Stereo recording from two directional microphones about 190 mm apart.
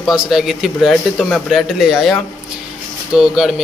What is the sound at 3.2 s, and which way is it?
Speech, 5° right (ahead or behind).